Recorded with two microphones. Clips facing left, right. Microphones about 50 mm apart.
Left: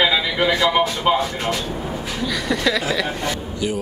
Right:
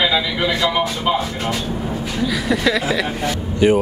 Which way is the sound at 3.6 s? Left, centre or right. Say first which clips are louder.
Right 10 dB; right.